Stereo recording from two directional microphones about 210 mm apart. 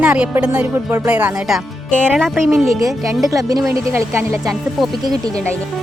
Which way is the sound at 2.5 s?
15° right (ahead or behind).